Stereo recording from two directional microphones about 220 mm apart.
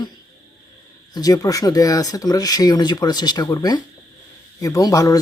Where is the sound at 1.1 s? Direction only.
15° left (ahead or behind).